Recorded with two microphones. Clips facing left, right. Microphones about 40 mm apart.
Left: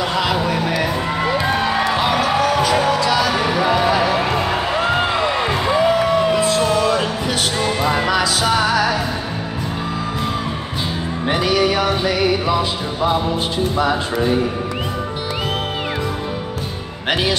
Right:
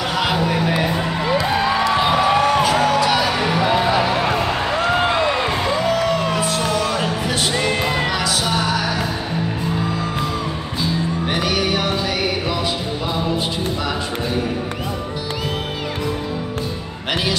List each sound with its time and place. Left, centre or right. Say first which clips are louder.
2.2 s music: right 1 dB; right
4.6 s a sound: even; centre
5.7 s music: left 5 dB; centre
8.4 s music: left 4 dB; left
17.1 s music: left 3 dB; left